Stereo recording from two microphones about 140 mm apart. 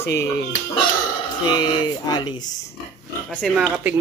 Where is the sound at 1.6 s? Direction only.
30° left (ahead or behind).